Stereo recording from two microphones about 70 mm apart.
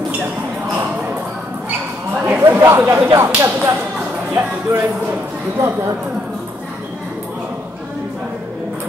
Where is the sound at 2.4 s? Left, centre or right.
Right.